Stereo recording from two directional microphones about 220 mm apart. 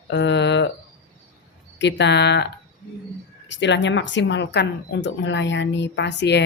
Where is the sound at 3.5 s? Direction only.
55° left (ahead or behind).